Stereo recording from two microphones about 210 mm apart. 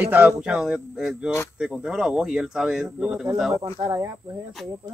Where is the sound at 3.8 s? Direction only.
15° right (ahead or behind).